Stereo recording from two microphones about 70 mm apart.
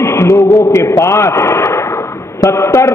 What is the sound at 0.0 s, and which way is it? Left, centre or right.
A man's voice, left.